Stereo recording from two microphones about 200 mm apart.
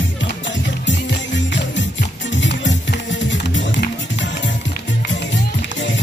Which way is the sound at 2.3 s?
65° left (ahead or behind).